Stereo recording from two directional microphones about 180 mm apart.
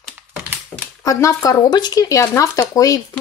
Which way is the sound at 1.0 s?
15° left (ahead or behind).